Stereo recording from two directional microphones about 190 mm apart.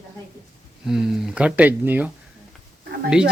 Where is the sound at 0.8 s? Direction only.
5° right (ahead or behind).